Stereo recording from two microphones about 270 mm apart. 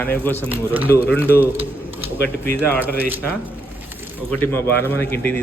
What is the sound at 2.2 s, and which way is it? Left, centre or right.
Speech, centre.